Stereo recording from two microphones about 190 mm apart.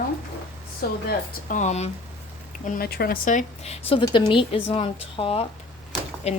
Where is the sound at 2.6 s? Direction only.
55° left (ahead or behind).